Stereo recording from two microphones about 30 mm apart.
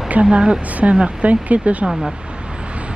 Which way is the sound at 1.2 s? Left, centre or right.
Right.